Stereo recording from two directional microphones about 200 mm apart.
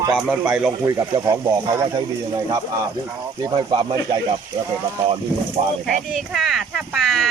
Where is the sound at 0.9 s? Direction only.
15° right (ahead or behind).